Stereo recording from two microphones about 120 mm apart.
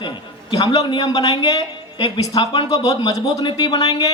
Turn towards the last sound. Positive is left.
turn(degrees=35)  # may be behind; listen again after turning